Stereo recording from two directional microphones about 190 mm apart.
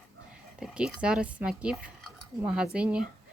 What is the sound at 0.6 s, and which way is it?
A woman's voice, 5° right (ahead or behind).